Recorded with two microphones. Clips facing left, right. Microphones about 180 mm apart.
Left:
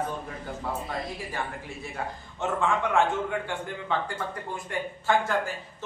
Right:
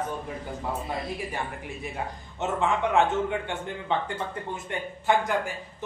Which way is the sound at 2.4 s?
20° right (ahead or behind).